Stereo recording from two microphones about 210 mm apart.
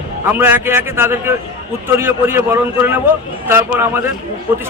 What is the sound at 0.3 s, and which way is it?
A man's voice, 10° right (ahead or behind).